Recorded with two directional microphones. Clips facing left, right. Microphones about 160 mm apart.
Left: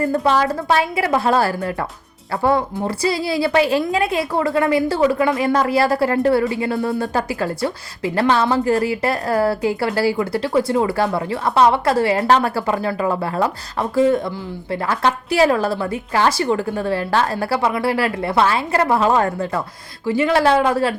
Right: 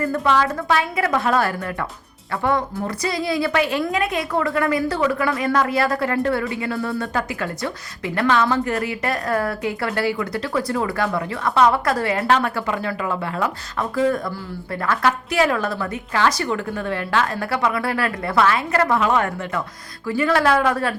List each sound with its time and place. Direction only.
0.2 s a woman's voice: 40° left (ahead or behind)